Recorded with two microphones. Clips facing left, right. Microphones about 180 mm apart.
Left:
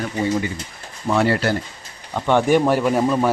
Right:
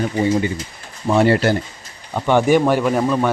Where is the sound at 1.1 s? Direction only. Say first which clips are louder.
Right 4 dB; 20° right (ahead or behind).